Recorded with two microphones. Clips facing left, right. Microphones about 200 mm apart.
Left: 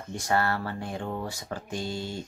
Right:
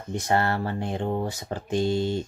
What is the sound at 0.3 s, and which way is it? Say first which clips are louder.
Speech: right 2 dB; 25° right (ahead or behind).